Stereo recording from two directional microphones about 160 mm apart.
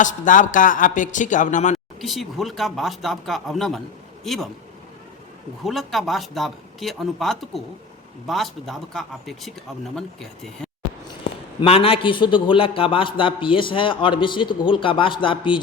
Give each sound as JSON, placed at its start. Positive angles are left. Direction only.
{"t": 0.0, "sound": "speech", "side_deg": 55}
{"t": 2.0, "sound": "speech", "side_deg": 0}
{"t": 5.6, "sound": "speech", "side_deg": 0}
{"t": 11.3, "sound": "a sound", "side_deg": 90}
{"t": 11.6, "sound": "a man's voice", "side_deg": 35}